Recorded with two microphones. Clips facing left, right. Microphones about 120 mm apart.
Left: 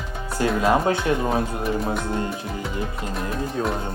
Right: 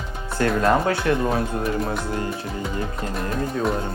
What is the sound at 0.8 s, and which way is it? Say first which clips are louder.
Speech: even; 20° left (ahead or behind).